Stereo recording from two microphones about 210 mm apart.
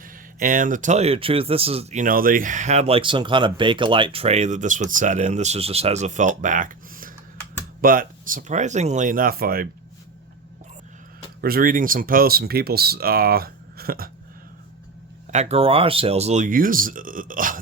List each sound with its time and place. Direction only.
0.0 s speech: 40° right (ahead or behind)
11.3 s speech: 45° right (ahead or behind)
15.3 s speech: 30° right (ahead or behind)